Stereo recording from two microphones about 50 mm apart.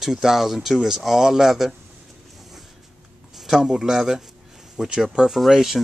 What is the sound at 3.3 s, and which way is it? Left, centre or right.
Speech, centre.